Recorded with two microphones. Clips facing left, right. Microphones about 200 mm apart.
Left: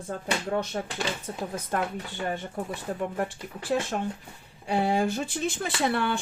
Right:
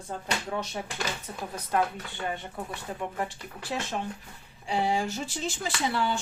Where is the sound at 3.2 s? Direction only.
50° left (ahead or behind).